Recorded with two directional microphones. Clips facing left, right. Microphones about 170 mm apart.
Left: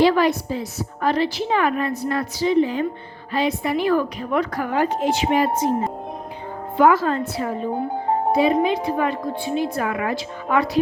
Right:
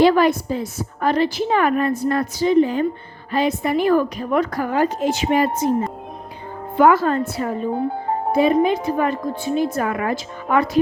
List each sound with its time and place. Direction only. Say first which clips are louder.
0.0 s a woman's voice: right 2 dB; 50° right (ahead or behind)
6.7 s a woman's voice: right 2 dB; 50° right (ahead or behind)